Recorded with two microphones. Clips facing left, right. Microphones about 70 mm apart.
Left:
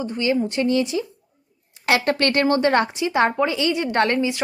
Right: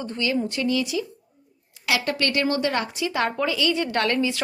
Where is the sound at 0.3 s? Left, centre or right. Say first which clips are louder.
Left 4 dB; left.